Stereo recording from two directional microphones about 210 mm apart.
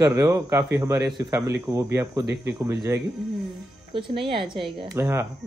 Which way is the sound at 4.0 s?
25° right (ahead or behind).